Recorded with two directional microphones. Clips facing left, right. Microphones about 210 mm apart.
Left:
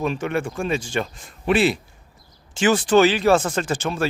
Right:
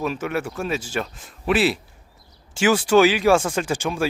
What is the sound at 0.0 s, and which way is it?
A man's voice, 5° right (ahead or behind).